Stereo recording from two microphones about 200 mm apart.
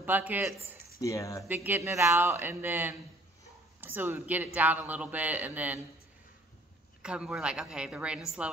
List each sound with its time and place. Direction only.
0.0 s a man's voice: 10° right (ahead or behind)
1.0 s speech: 15° left (ahead or behind)
1.5 s a man's voice: 10° right (ahead or behind)
7.0 s a woman's voice: 5° right (ahead or behind)